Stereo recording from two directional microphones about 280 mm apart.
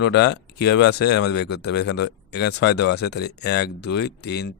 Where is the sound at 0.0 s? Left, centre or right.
Left.